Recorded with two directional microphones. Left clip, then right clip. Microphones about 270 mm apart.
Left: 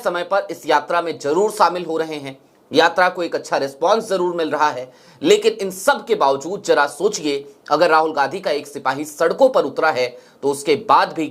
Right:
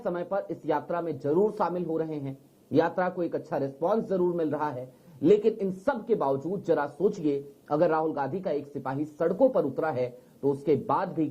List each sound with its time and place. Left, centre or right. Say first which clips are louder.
0.0 s a man's voice: left 11 dB; centre
6.3 s speech: left 7 dB; left
6.7 s speech: left 10 dB; centre
9.3 s speech: left 9 dB; left
9.8 s speech: left 11 dB; centre